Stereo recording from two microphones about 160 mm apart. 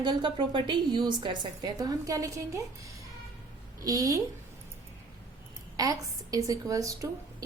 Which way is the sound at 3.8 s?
20° right (ahead or behind).